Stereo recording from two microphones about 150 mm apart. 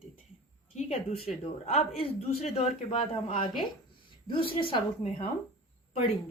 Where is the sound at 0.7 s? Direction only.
40° left (ahead or behind).